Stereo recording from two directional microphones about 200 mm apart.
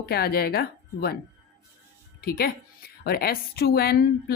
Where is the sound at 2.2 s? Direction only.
50° left (ahead or behind).